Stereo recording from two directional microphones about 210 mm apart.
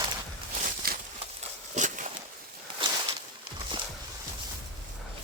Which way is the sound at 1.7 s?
35° right (ahead or behind).